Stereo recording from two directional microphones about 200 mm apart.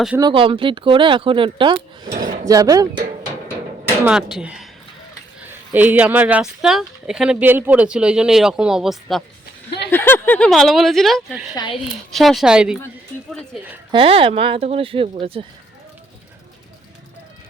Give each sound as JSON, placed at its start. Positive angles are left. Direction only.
{"t": 0.2, "sound": "speech", "side_deg": -25}
{"t": 2.1, "sound": "speech", "side_deg": -40}
{"t": 2.5, "sound": "speech", "side_deg": -15}
{"t": 4.0, "sound": "speech", "side_deg": -5}
{"t": 9.9, "sound": "speech", "side_deg": 10}
{"t": 13.9, "sound": "speech", "side_deg": -25}